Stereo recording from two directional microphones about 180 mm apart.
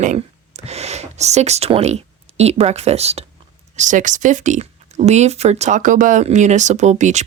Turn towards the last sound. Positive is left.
turn(degrees=-40)  # may be behind; listen again after turning